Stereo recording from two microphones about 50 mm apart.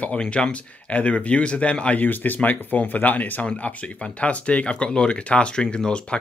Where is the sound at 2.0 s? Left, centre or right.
Left; by 6.2 s centre.